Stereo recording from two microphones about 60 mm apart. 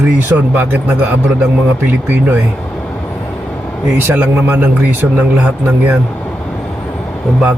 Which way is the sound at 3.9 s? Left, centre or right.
Right.